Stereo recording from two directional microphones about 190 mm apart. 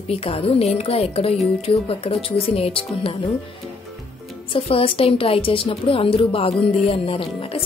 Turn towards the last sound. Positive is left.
turn(degrees=30)  # may be behind; listen again after turning